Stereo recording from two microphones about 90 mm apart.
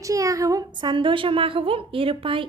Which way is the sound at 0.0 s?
40° right (ahead or behind).